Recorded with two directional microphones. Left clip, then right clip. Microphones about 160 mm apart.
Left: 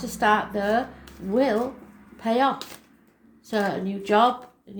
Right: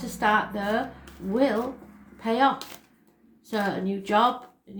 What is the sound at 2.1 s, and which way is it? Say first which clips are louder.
Speech: even; 30° left (ahead or behind).